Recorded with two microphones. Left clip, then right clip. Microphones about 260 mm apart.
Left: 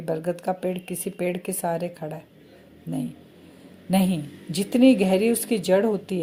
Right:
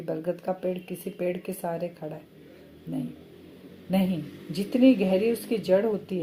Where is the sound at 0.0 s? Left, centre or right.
Left.